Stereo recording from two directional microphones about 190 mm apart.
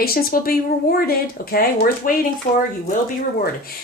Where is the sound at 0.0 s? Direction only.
50° left (ahead or behind).